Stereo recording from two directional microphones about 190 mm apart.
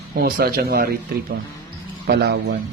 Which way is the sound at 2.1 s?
60° right (ahead or behind).